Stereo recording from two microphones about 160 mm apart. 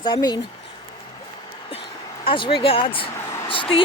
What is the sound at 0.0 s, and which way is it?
Speech, 25° left (ahead or behind).